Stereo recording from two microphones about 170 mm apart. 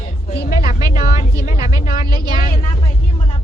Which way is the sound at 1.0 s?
40° left (ahead or behind).